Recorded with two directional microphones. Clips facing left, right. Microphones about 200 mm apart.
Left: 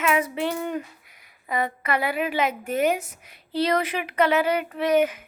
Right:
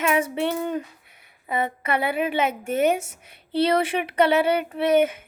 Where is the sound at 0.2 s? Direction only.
20° right (ahead or behind).